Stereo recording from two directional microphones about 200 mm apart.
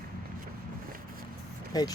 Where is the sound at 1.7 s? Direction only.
20° left (ahead or behind).